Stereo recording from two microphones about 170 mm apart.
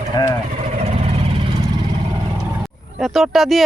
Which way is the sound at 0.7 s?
40° right (ahead or behind).